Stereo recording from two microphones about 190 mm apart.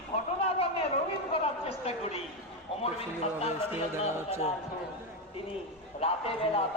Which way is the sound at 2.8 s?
30° left (ahead or behind).